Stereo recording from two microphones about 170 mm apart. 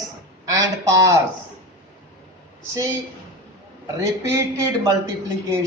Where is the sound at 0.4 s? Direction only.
20° right (ahead or behind).